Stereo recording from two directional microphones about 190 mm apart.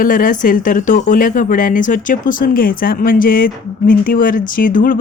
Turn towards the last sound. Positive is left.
turn(degrees=45)  # may be behind; listen again after turning